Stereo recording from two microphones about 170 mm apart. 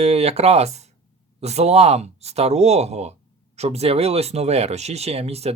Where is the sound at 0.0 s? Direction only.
40° right (ahead or behind).